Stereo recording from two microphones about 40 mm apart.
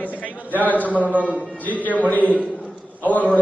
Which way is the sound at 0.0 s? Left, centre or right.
Left.